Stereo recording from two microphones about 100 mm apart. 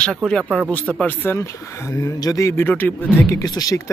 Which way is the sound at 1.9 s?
35° left (ahead or behind).